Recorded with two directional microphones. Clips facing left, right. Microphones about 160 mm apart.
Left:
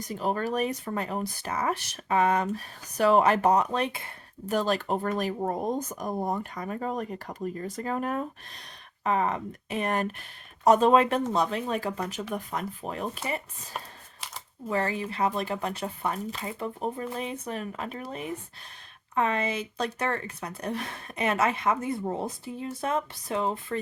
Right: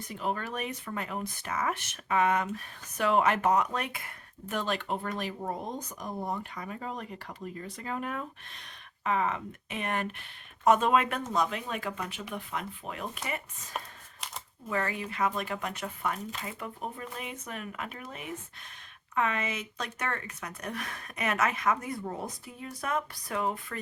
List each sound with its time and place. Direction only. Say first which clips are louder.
0.0 s speech: left 5 dB; 40° left (ahead or behind)
14.7 s speech: left 4 dB; 30° left (ahead or behind)